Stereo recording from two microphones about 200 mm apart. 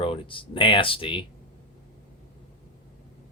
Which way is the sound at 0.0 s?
25° left (ahead or behind).